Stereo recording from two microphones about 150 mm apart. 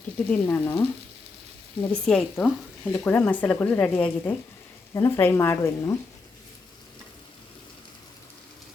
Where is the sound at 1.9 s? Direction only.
5° left (ahead or behind).